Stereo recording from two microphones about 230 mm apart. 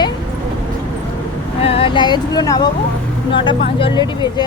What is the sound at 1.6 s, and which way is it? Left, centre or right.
Speech, left.